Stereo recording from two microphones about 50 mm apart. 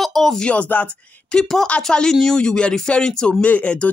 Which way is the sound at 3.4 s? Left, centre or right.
Left.